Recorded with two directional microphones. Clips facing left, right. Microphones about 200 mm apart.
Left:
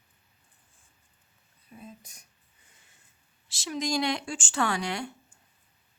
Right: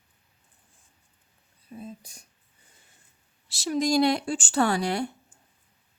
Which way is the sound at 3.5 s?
40° right (ahead or behind).